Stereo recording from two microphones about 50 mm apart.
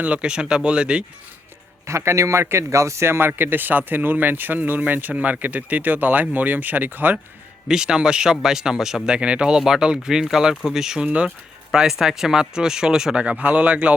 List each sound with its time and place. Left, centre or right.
0.0 s speech: right
1.9 s a man's voice: right
2.4 s speech: right
7.7 s speech: centre
9.0 s speech: right
13.2 s speech: right